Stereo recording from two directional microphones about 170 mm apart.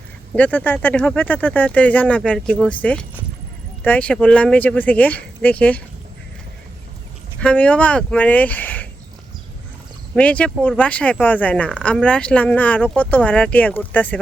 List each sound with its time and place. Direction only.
0.3 s speech: 10° left (ahead or behind)
7.3 s speech: 10° left (ahead or behind)
10.2 s speech: 10° left (ahead or behind)